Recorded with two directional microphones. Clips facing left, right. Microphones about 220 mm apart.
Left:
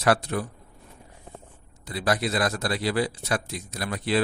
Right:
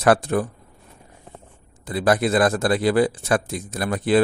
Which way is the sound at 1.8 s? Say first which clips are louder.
Right 6 dB; 50° right (ahead or behind).